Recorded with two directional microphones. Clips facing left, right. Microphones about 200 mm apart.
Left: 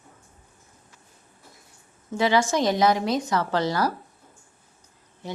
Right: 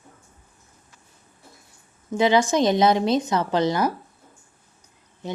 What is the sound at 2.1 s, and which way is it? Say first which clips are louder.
Speech: right 3 dB; 20° right (ahead or behind).